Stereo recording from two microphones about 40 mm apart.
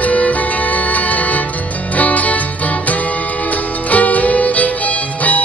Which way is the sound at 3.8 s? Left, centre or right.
Left.